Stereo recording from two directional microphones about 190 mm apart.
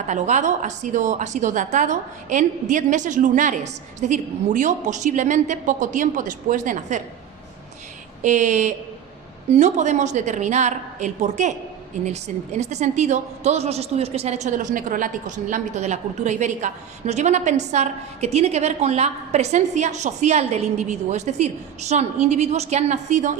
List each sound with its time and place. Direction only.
0.1 s a woman's voice: 40° right (ahead or behind)
8.2 s a woman's voice: 40° right (ahead or behind)